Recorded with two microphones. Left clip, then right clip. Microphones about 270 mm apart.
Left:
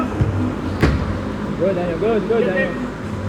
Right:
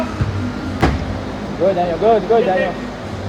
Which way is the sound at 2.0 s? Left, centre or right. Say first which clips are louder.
Right 5 dB; right.